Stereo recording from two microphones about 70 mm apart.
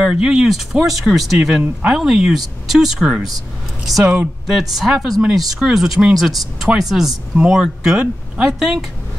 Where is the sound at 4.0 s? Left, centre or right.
Centre.